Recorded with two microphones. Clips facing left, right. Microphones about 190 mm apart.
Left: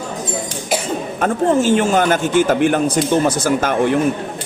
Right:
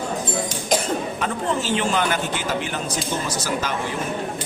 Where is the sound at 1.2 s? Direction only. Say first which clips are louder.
Left 9 dB; 50° left (ahead or behind).